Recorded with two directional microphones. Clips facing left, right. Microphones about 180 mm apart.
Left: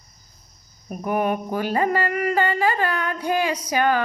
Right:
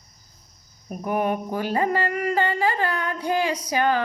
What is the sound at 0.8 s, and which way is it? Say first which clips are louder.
Speech: left 2 dB; 10° left (ahead or behind).